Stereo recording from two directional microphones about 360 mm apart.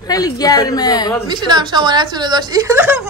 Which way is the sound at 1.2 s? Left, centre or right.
Centre.